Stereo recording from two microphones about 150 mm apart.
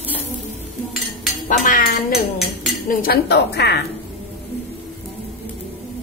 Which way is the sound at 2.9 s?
80° left.